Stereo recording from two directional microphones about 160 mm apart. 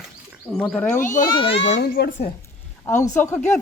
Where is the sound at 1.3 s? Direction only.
35° left (ahead or behind).